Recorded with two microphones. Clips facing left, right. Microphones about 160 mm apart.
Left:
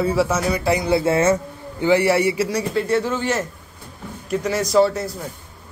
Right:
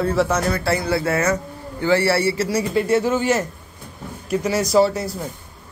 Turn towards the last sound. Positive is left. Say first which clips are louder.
# even
turn(degrees=-5)  # may be behind; listen again after turning